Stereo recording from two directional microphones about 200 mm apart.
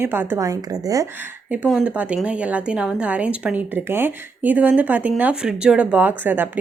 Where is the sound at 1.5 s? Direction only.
5° right (ahead or behind).